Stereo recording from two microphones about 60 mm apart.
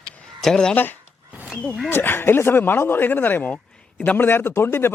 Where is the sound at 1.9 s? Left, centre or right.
Left.